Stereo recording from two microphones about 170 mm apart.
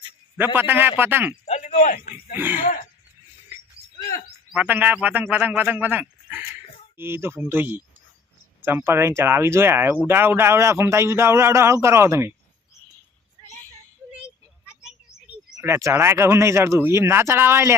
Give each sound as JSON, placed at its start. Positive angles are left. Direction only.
{"t": 0.3, "sound": "speech", "side_deg": -10}
{"t": 1.5, "sound": "speech", "side_deg": 45}
{"t": 4.5, "sound": "speech", "side_deg": -10}
{"t": 15.5, "sound": "speech", "side_deg": -15}